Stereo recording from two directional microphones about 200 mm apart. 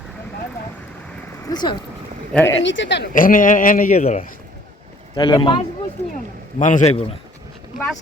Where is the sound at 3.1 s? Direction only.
40° left (ahead or behind).